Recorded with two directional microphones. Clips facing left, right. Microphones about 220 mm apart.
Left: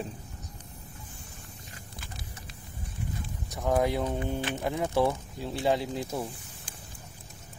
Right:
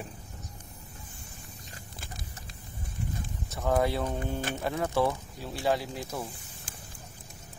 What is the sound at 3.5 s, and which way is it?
Speech, 15° left (ahead or behind).